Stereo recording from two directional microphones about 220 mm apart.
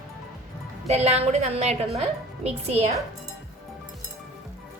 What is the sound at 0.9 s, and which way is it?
A woman's voice, 30° right (ahead or behind).